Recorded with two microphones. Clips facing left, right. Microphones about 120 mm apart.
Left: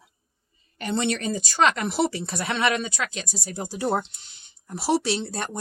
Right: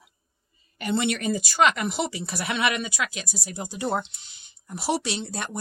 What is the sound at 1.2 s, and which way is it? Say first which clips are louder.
Speech: right 1 dB; 15° right (ahead or behind).